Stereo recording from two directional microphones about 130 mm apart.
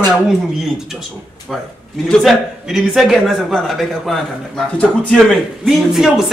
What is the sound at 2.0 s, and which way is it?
A man's voice, centre (ahead or behind).